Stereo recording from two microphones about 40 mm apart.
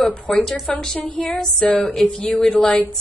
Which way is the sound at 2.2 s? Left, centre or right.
Left.